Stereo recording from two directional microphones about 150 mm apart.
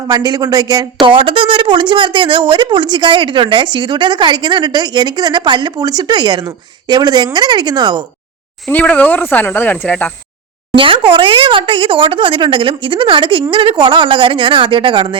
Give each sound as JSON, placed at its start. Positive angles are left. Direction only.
{"t": 0.1, "sound": "speech", "side_deg": -25}
{"t": 8.6, "sound": "speech", "side_deg": 10}
{"t": 10.8, "sound": "speech", "side_deg": -35}